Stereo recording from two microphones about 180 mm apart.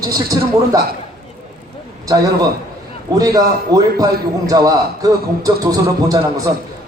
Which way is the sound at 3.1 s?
20° right (ahead or behind).